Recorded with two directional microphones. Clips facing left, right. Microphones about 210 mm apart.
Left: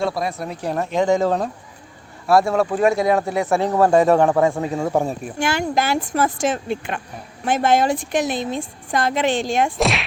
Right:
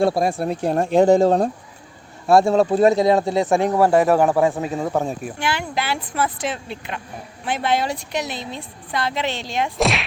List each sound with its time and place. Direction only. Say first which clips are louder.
0.3 s speech: right 4 dB; 30° right (ahead or behind); by 4.6 s 5° right (ahead or behind)
4.8 s speech: left 2 dB; 5° left (ahead or behind)
5.4 s a woman's voice: left 6 dB; 45° left (ahead or behind)
9.7 s speech: even; centre (ahead or behind)